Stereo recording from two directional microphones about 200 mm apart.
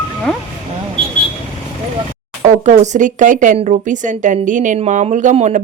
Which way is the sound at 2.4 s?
35° right (ahead or behind).